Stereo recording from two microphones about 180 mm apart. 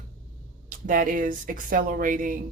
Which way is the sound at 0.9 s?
50° right (ahead or behind).